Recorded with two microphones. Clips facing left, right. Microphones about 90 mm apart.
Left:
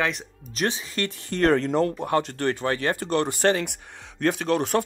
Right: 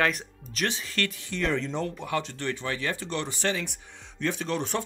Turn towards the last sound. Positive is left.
turn(degrees=55)  # may be behind; listen again after turning